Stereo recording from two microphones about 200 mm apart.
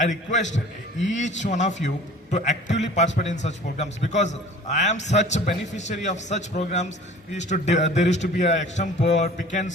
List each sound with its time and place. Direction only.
0.0 s a man's voice: 35° left (ahead or behind)